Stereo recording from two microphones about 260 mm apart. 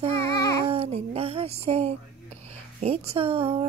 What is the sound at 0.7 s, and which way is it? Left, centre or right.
Speech, right.